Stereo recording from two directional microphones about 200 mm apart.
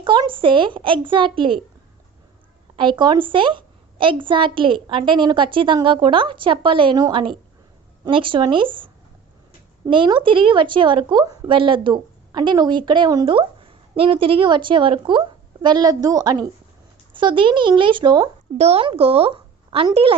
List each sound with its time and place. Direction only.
0.0 s a woman's voice: 25° right (ahead or behind)
2.7 s a woman's voice: 25° right (ahead or behind)